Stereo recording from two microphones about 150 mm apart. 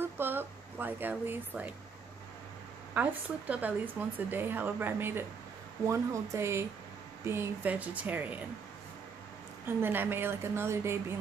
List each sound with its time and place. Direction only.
0.0 s a sound: 15° right (ahead or behind)
2.9 s speech: 10° right (ahead or behind)
9.7 s speech: 15° right (ahead or behind)